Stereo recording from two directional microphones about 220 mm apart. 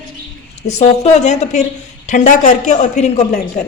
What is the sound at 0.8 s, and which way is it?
A woman's voice, 30° left (ahead or behind).